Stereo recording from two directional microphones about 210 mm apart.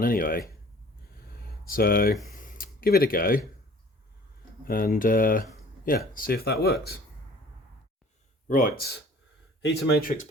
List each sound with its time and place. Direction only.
0.0 s speech: 45° left (ahead or behind)
1.6 s speech: 45° left (ahead or behind)
2.2 s a sound: 40° left (ahead or behind)
4.7 s speech: 40° left (ahead or behind)
8.4 s speech: 40° left (ahead or behind)